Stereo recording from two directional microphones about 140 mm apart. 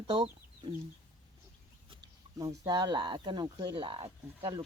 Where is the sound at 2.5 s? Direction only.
30° right (ahead or behind).